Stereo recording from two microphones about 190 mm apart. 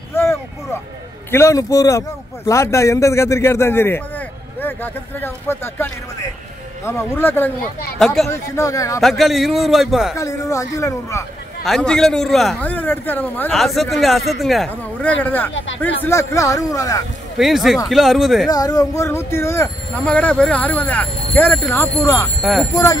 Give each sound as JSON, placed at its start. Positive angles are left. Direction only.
{"t": 0.1, "sound": "a sound", "side_deg": 15}
{"t": 1.3, "sound": "a man's voice", "side_deg": 15}
{"t": 8.3, "sound": "speech", "side_deg": 15}
{"t": 9.0, "sound": "a man's voice", "side_deg": 0}
{"t": 10.1, "sound": "speech", "side_deg": 15}
{"t": 11.6, "sound": "a man's voice", "side_deg": 0}
{"t": 17.4, "sound": "a man's voice", "side_deg": 0}
{"t": 18.5, "sound": "speech", "side_deg": 20}
{"t": 22.4, "sound": "speech", "side_deg": 0}